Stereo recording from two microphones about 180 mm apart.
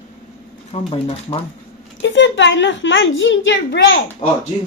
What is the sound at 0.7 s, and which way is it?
Speech, 35° left (ahead or behind).